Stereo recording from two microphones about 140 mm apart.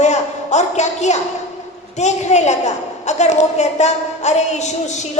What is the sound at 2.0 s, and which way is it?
A woman's voice, 55° left (ahead or behind).